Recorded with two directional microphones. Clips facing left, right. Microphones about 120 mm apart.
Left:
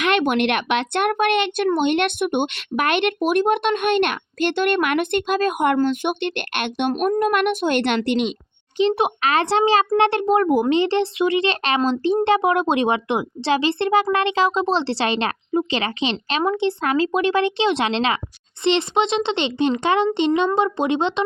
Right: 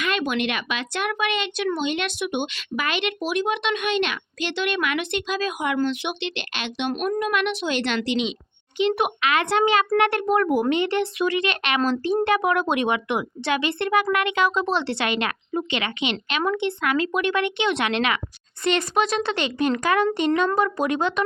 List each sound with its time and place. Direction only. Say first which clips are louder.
0.0 s speech: left 6 dB; 65° left (ahead or behind)
8.8 s a child's voice: left 3 dB; 30° left (ahead or behind)